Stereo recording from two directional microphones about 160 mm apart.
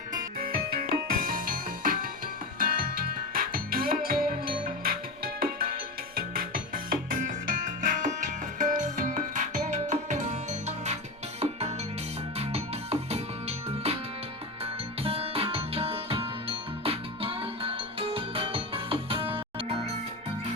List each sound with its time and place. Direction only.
0.8 s music: 60° right (ahead or behind); by 10.9 s 45° right (ahead or behind)
12.4 s music: 40° right (ahead or behind)